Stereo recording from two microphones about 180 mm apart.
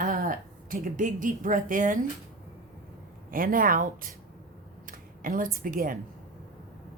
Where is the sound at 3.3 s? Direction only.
50° right (ahead or behind).